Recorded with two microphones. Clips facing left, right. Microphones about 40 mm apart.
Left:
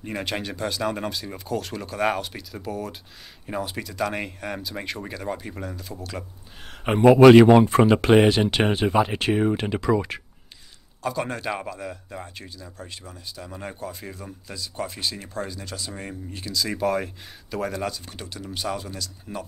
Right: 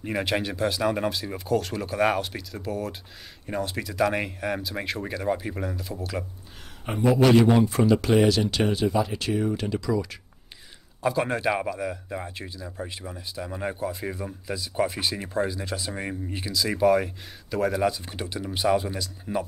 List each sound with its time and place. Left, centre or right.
0.0 s speech: centre
6.9 s a man's voice: left
7.2 s speech: left
7.4 s speech: left
11.0 s a man's voice: centre
16.5 s a man's voice: centre